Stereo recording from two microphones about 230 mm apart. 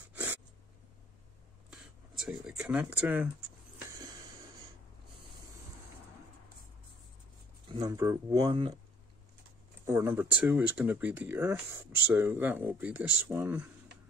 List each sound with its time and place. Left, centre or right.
0.1 s a sound: centre
1.7 s speech: centre
7.6 s speech: centre
9.8 s speech: centre